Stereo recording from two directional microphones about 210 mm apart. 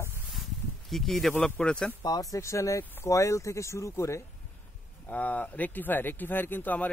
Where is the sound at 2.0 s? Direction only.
20° left (ahead or behind).